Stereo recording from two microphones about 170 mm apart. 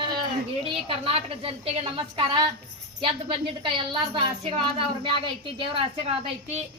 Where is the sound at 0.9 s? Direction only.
30° right (ahead or behind).